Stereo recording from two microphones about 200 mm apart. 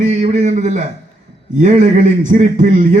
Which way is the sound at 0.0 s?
35° right (ahead or behind).